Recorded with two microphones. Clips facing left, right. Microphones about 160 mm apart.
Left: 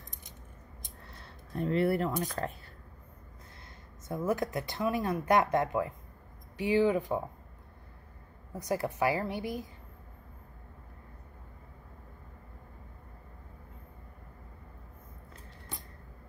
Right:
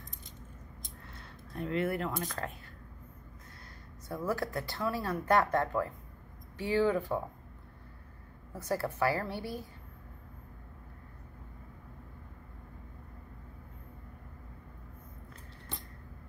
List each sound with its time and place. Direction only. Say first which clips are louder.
1.5 s speech: left 4 dB; 30° left (ahead or behind)
4.1 s speech: left 3 dB; 20° left (ahead or behind)
8.5 s speech: left 1 dB; 15° left (ahead or behind)